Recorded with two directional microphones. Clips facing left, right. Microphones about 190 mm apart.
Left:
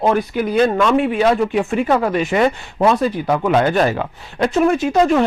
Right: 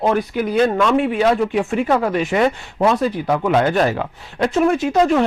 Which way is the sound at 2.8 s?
30° left (ahead or behind).